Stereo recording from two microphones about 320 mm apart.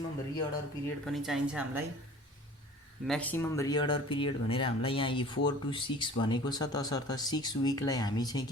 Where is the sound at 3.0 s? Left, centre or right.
Centre.